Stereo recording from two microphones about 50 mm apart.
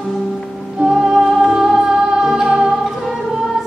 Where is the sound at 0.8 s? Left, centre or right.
Centre.